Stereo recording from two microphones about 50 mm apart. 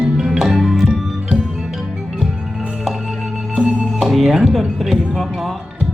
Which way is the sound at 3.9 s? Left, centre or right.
Centre.